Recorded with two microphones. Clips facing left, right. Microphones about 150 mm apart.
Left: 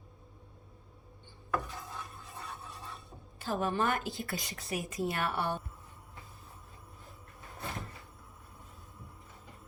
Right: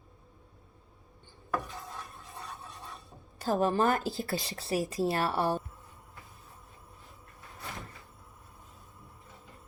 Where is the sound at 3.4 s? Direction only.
40° right (ahead or behind).